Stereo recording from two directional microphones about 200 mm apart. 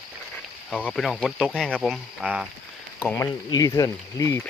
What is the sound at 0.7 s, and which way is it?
Speech, 5° left (ahead or behind).